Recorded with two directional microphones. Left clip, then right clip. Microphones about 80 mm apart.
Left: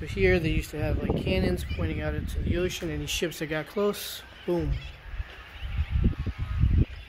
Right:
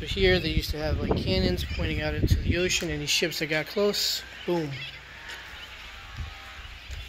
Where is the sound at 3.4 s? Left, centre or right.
Centre.